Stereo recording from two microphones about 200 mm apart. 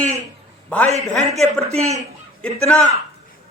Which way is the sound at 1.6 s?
30° right (ahead or behind).